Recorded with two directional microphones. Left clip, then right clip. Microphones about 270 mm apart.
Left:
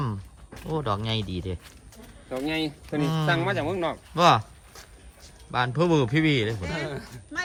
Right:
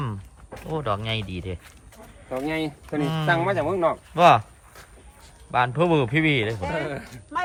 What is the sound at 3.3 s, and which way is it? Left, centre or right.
Speech, right.